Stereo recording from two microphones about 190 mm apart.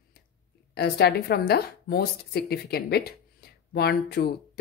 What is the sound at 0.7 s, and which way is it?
Speech, 55° left (ahead or behind).